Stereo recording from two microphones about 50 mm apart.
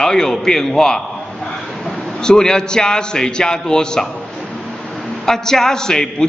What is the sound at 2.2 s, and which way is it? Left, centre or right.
A man's voice, centre.